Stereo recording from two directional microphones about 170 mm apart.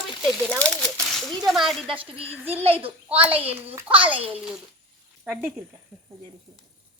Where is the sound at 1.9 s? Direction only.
30° right (ahead or behind).